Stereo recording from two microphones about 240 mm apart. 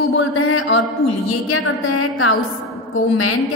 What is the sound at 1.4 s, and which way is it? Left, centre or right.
Speech, left.